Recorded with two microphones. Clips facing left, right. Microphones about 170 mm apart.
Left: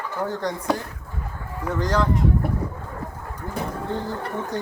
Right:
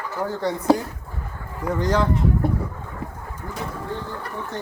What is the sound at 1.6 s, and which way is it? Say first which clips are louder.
Speech: right 2 dB; 10° right (ahead or behind).